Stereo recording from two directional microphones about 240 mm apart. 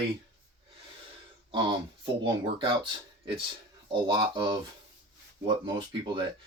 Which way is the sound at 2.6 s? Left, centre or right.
Right.